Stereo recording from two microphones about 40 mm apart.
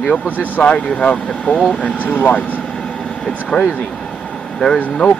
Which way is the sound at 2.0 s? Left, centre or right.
Left.